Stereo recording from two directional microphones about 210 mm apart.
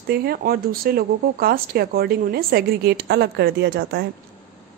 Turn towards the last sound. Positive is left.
turn(degrees=-50)  # may be behind; listen again after turning